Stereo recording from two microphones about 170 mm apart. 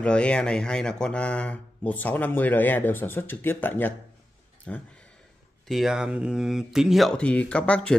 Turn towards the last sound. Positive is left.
turn(degrees=5)  # may be behind; listen again after turning